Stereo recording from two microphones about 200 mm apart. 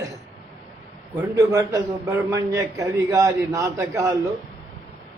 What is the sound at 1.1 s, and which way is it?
A man's voice, 15° right (ahead or behind).